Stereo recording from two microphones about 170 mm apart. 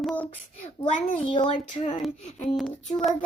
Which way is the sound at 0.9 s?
30° left (ahead or behind).